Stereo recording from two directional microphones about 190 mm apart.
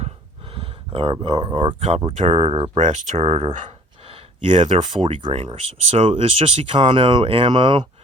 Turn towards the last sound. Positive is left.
turn(degrees=-25)  # may be behind; listen again after turning